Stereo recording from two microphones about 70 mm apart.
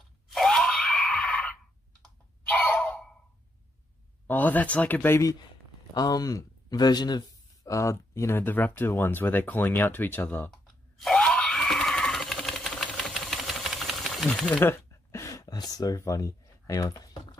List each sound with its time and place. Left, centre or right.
0.3 s screaming: centre
2.4 s a sound: left
4.3 s speech: left
5.2 s speech: left
7.6 s speech: left
11.0 s grunt: centre
11.2 s sewing machine: centre
14.6 s a sound: left
16.0 s speech: left
16.9 s a sound: left